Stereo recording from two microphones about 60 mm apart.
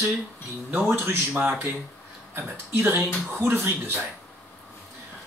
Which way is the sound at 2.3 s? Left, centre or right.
Right.